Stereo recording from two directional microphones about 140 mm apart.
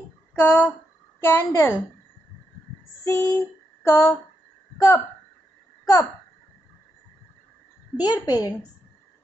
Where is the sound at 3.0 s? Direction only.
20° left (ahead or behind).